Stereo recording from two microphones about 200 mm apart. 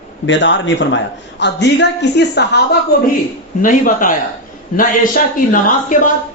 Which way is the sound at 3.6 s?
40° left (ahead or behind).